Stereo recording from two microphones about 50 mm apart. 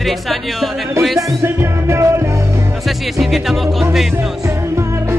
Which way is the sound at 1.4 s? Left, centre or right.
Right.